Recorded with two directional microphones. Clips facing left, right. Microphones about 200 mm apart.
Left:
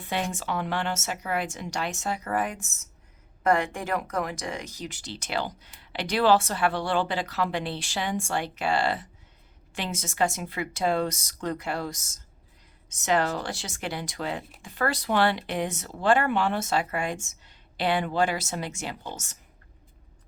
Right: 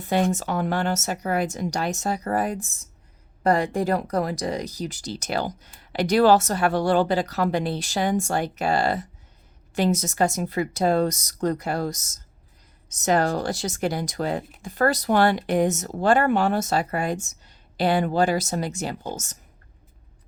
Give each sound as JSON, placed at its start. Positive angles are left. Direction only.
{"t": 0.0, "sound": "speech", "side_deg": -40}